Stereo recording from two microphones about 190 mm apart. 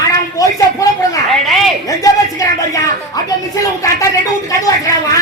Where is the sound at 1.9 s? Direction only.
20° left (ahead or behind).